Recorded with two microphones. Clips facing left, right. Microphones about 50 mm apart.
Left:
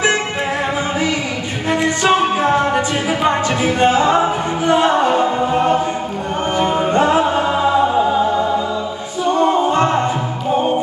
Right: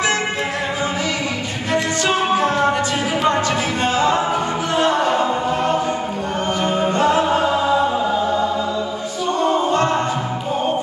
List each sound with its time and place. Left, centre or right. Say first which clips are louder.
1.7 s music: left 4 dB; centre
6.6 s singing: left 3 dB; centre
9.7 s music: left 2 dB; left